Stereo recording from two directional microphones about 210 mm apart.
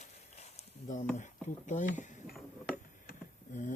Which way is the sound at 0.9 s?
35° left (ahead or behind).